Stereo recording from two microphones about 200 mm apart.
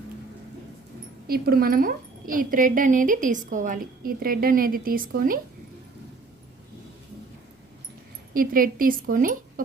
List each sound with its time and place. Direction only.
1.3 s a woman's voice: 50° right (ahead or behind)
8.3 s a woman's voice: 45° right (ahead or behind)